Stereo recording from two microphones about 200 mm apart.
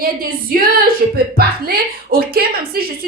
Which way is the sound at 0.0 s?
45° right (ahead or behind).